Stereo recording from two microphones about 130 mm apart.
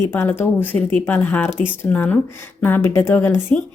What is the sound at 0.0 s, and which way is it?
A woman's voice, 20° left (ahead or behind).